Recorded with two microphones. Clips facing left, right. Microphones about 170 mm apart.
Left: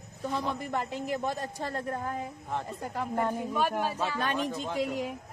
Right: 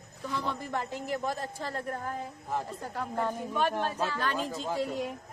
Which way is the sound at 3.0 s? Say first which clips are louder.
Left 2 dB; 10° left (ahead or behind).